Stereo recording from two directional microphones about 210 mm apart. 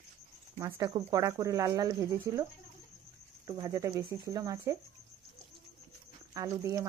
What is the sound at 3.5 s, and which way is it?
Speech, 15° right (ahead or behind).